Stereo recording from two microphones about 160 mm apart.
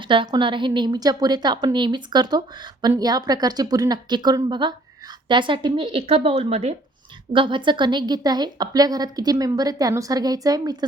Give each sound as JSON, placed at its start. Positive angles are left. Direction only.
{"t": 0.1, "sound": "a woman's voice", "side_deg": -30}